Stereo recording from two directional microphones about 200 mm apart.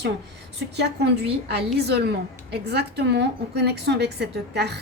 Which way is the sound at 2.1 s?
55° right (ahead or behind).